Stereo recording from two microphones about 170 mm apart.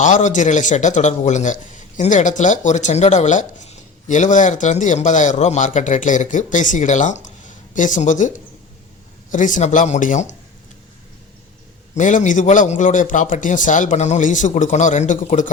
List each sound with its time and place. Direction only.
0.0 s a man's voice: 45° left (ahead or behind)
9.3 s a man's voice: 50° left (ahead or behind)
11.9 s a man's voice: 45° left (ahead or behind)